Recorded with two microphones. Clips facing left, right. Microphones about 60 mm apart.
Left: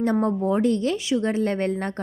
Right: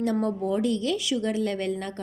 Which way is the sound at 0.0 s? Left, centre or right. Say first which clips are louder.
Left 4 dB; left.